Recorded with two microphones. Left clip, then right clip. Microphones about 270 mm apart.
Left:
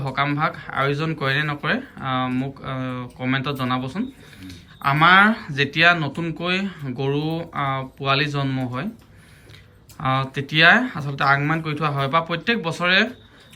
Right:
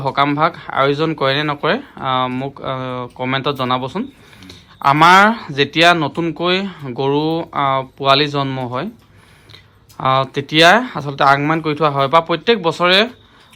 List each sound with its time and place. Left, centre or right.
0.1 s speech: centre
10.0 s speech: centre